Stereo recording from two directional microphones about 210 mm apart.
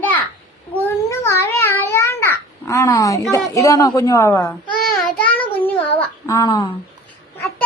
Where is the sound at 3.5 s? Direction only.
15° left (ahead or behind).